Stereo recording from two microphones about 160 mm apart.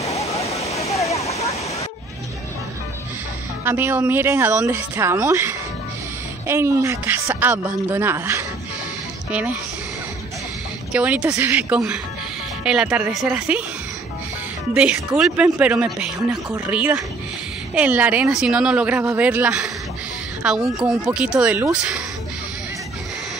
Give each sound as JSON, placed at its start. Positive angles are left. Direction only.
{"t": 0.0, "sound": "waterfall", "side_deg": 40}
{"t": 3.6, "sound": "speech", "side_deg": -15}
{"t": 10.9, "sound": "speech", "side_deg": -5}
{"t": 14.7, "sound": "speech", "side_deg": -5}